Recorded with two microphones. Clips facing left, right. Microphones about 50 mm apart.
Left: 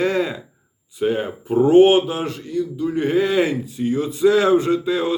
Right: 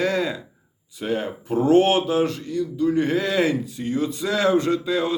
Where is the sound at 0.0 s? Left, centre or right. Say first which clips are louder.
Left 2 dB; left.